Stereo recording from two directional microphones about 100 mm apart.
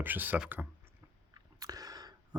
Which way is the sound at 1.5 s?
40° right (ahead or behind).